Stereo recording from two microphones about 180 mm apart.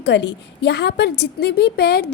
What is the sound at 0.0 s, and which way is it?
A woman's voice, 80° left.